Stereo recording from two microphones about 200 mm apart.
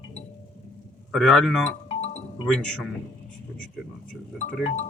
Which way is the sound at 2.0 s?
35° left (ahead or behind).